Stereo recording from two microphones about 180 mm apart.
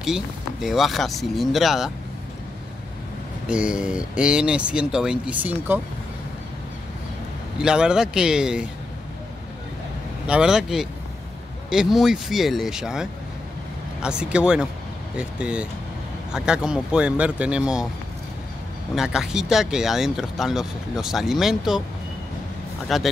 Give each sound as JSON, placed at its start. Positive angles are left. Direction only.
{"t": 0.0, "sound": "speech", "side_deg": 0}
{"t": 3.4, "sound": "speech", "side_deg": -5}
{"t": 7.5, "sound": "speech", "side_deg": -5}
{"t": 10.2, "sound": "speech", "side_deg": -5}
{"t": 18.9, "sound": "speech", "side_deg": -5}
{"t": 22.9, "sound": "speech", "side_deg": 0}